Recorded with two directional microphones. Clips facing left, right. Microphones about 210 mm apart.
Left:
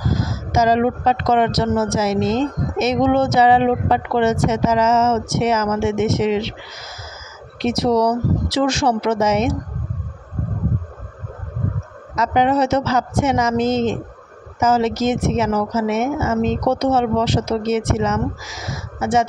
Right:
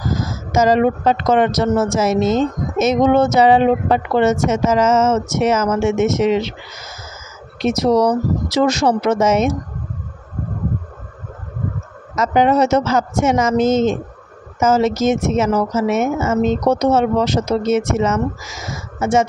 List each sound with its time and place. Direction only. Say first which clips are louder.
0.5 s speech: right 2 dB; 45° right (ahead or behind)
7.6 s speech: right 2 dB; 45° right (ahead or behind)
12.2 s speech: right 2 dB; 45° right (ahead or behind)